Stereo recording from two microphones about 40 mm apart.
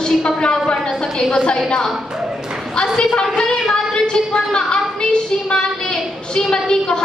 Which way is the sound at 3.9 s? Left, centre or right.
Centre.